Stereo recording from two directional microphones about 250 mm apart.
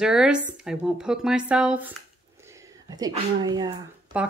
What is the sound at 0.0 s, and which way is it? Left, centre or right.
Speech, centre.